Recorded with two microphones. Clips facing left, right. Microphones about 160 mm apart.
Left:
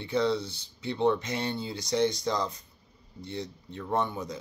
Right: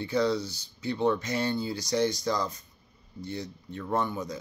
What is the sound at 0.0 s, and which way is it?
Speech, 25° left (ahead or behind).